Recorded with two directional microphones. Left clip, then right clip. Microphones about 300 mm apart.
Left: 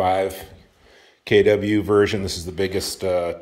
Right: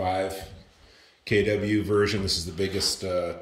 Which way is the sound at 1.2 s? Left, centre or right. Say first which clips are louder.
Left 8 dB; centre.